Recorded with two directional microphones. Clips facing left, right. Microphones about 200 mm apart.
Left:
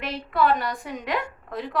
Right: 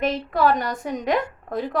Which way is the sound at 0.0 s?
45° right (ahead or behind).